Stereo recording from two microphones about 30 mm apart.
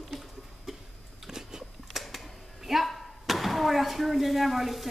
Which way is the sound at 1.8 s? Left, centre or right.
Centre.